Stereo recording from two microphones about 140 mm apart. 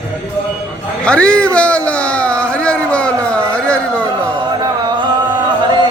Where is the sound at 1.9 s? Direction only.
10° left (ahead or behind).